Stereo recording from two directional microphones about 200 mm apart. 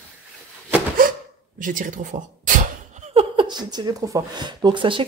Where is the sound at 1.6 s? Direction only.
40° right (ahead or behind); by 5.0 s 25° right (ahead or behind).